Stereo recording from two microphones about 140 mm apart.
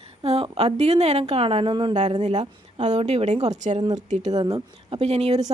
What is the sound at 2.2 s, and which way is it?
Speech, 55° right (ahead or behind).